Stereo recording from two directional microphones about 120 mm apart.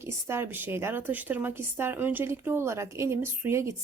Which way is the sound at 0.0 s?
20° right (ahead or behind).